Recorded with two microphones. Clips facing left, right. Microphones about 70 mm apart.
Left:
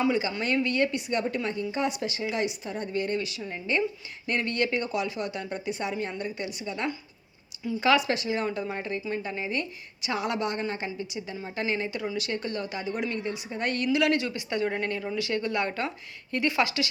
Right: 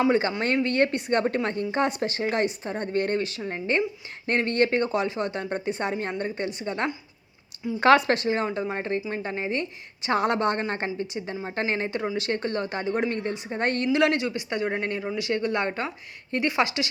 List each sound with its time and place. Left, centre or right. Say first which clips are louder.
0.1 s a woman's voice: right 4 dB; right
8.4 s a woman's voice: right 3 dB; right